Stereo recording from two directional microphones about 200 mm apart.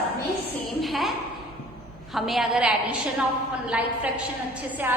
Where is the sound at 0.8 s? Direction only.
Centre (ahead or behind).